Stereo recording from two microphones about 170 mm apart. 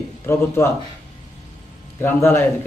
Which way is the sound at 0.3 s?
15° left (ahead or behind).